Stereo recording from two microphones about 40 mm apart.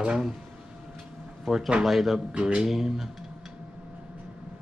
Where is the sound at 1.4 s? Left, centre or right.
Centre.